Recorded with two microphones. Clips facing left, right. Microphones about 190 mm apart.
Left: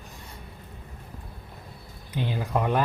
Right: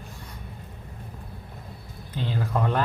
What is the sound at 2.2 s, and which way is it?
Speech, 15° left (ahead or behind).